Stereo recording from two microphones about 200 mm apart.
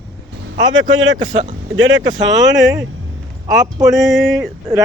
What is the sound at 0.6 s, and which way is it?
Speech, 75° right (ahead or behind).